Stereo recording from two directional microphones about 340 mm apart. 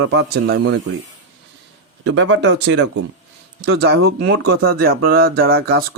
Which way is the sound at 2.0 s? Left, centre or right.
Right.